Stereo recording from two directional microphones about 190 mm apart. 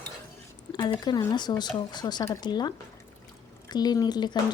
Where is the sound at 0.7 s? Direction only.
25° left (ahead or behind).